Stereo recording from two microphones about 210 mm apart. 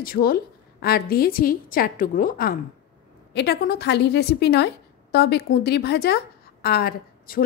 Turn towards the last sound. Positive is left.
turn(degrees=45)  # may be behind; listen again after turning